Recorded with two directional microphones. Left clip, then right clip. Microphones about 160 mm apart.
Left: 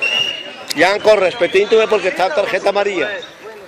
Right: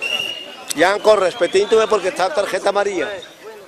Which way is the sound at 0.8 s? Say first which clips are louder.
Left 2 dB; 25° right (ahead or behind).